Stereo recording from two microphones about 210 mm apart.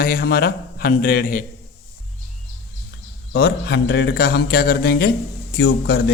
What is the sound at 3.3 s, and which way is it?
Speech, 50° left (ahead or behind).